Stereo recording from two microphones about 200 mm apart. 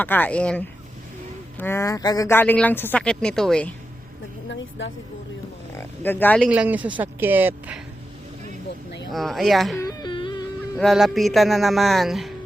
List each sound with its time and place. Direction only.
0.0 s speech: 10° left (ahead or behind)
5.7 s speech: 10° left (ahead or behind)
6.5 s speech: 5° right (ahead or behind)
9.1 s a man's voice: centre (ahead or behind)
9.7 s whimper: 20° left (ahead or behind)
10.8 s a man's voice: centre (ahead or behind)